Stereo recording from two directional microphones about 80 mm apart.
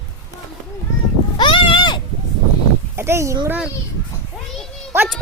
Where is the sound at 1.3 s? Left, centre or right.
Left.